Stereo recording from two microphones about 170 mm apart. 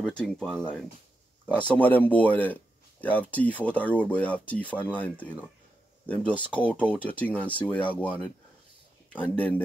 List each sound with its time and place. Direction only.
0.0 s speech: 5° left (ahead or behind)
6.5 s speech: 5° left (ahead or behind)